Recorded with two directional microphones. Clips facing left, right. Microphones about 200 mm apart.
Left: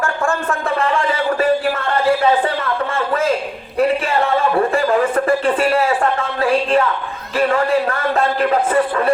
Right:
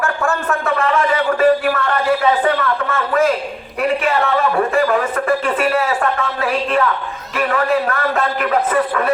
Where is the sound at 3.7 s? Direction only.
30° left (ahead or behind).